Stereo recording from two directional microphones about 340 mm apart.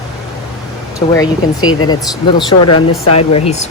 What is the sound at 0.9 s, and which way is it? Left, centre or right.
Speech, centre.